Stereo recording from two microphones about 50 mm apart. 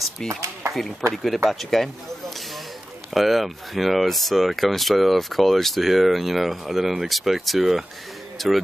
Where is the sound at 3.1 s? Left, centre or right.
Centre.